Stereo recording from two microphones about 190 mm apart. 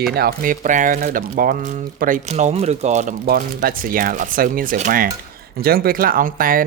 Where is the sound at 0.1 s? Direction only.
55° right (ahead or behind).